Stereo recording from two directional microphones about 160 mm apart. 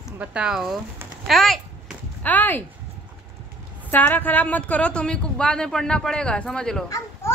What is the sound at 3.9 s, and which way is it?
Speech, 10° left (ahead or behind).